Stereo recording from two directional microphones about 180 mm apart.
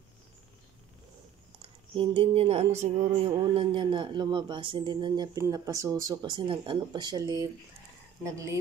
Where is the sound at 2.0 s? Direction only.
30° right (ahead or behind).